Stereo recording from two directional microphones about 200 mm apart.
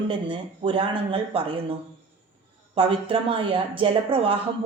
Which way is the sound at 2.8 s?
25° right (ahead or behind).